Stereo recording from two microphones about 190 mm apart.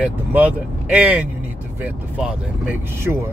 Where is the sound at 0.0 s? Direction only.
10° right (ahead or behind).